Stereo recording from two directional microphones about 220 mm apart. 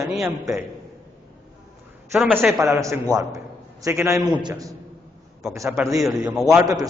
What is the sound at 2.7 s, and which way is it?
A man's voice, 15° right (ahead or behind).